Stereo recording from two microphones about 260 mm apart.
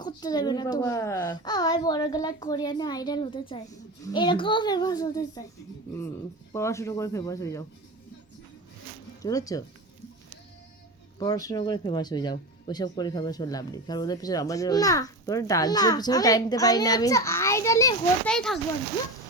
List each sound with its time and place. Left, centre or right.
0.0 s speech: centre
6.5 s speech: centre
9.2 s speech: centre
11.2 s speech: centre